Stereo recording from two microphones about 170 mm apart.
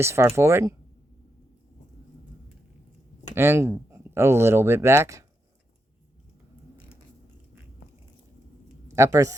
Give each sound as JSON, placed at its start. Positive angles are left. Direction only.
{"t": 0.0, "sound": "speech", "side_deg": -15}
{"t": 3.3, "sound": "speech", "side_deg": -15}
{"t": 8.9, "sound": "speech", "side_deg": -20}